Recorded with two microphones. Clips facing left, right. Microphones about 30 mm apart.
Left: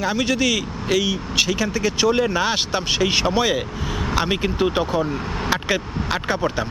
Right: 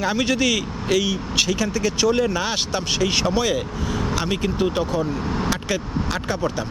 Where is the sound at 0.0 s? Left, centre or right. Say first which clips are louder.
Even; centre.